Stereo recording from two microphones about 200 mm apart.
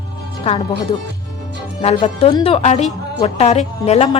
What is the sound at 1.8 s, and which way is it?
Speech, 30° left (ahead or behind).